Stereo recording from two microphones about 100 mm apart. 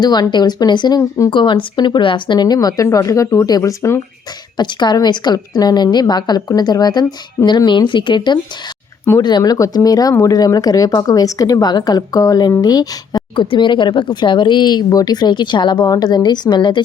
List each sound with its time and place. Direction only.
0.0 s speech: 45° left (ahead or behind)
4.5 s speech: 50° left (ahead or behind)
13.3 s speech: 55° left (ahead or behind)